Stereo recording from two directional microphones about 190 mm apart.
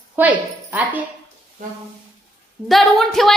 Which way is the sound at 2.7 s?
Centre (ahead or behind).